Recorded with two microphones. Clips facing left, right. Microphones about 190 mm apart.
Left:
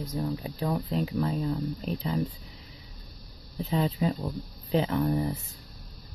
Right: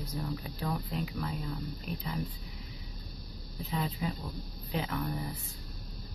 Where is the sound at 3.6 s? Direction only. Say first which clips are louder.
Left 8 dB; 30° left (ahead or behind).